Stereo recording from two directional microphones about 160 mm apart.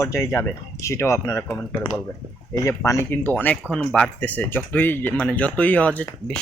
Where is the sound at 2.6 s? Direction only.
15° left (ahead or behind).